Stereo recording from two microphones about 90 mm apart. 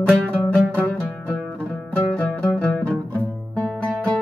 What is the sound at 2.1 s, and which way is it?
Music, 15° left (ahead or behind).